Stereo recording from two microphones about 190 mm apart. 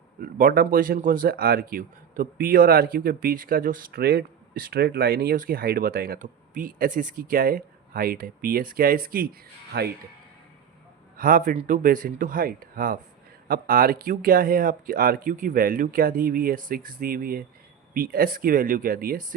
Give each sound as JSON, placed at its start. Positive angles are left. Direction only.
{"t": 0.2, "sound": "speech", "side_deg": -50}
{"t": 11.2, "sound": "speech", "side_deg": -45}